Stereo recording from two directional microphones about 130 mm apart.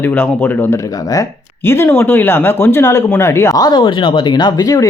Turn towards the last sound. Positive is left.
turn(degrees=30)  # may be behind; listen again after turning